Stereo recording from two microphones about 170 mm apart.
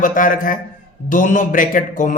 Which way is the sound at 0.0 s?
50° left (ahead or behind).